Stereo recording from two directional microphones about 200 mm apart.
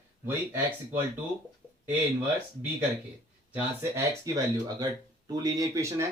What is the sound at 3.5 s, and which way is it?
Speech, 15° right (ahead or behind).